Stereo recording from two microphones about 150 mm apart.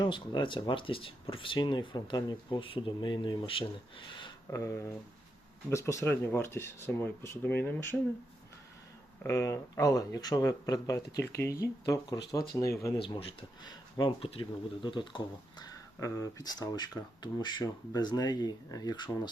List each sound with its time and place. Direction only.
0.0 s speech: 30° left (ahead or behind)
4.5 s speech: 20° left (ahead or behind)
9.2 s speech: 20° left (ahead or behind)
13.0 s speech: 35° left (ahead or behind)